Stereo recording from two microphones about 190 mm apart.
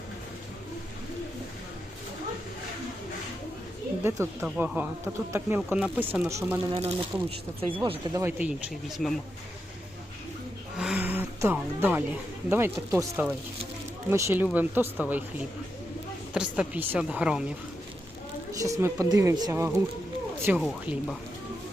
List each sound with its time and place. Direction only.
4.0 s speech: 15° right (ahead or behind)
6.7 s speech: 30° right (ahead or behind); by 8.5 s 10° right (ahead or behind)
10.8 s speech: 5° right (ahead or behind)
16.3 s a woman's voice: 5° right (ahead or behind)
18.6 s speech: 15° right (ahead or behind)
20.6 s a woman's voice: centre (ahead or behind)